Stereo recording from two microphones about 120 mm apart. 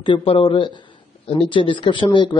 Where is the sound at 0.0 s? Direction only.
50° left (ahead or behind).